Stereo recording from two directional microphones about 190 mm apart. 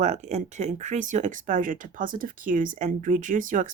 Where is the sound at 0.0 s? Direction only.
40° right (ahead or behind).